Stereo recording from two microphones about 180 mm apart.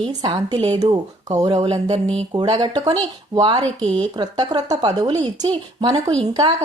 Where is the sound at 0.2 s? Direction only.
25° right (ahead or behind).